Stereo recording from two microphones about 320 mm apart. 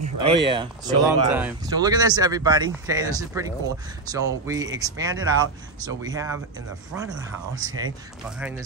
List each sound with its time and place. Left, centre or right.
0.2 s speech: centre